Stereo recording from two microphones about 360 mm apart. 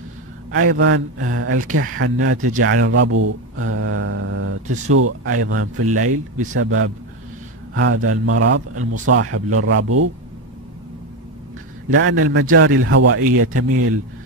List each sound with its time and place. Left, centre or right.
0.6 s speech: right
11.9 s speech: right